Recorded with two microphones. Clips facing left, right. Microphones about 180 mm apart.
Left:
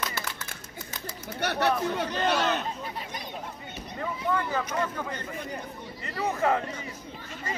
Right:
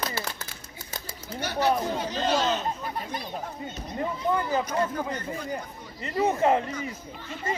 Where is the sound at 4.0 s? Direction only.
20° right (ahead or behind).